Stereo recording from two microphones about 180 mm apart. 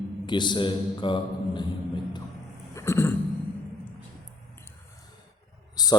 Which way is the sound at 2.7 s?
15° left (ahead or behind).